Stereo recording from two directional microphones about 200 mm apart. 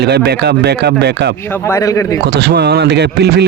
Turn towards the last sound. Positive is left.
turn(degrees=-55)  # may be behind; listen again after turning